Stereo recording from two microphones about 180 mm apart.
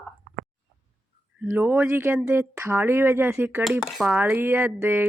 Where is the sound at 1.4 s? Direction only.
10° right (ahead or behind).